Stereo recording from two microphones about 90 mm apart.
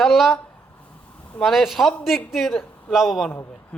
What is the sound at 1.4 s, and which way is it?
Speech, centre (ahead or behind).